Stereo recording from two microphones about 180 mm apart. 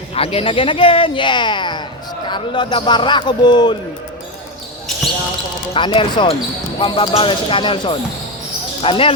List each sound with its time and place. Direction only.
0.1 s speech: 30° left (ahead or behind)
5.7 s speech: 30° left (ahead or behind)